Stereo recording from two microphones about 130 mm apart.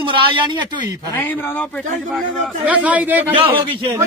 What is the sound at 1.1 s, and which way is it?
Speech, 15° left (ahead or behind).